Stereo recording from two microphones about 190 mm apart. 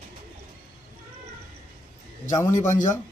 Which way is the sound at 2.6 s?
40° left (ahead or behind).